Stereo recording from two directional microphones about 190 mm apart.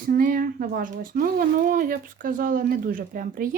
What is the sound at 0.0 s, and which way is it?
Speech, 50° right (ahead or behind).